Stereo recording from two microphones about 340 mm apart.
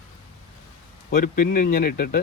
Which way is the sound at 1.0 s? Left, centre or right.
Left.